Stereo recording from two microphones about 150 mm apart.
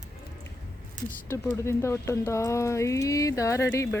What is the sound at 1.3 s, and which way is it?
Speech, 15° left (ahead or behind).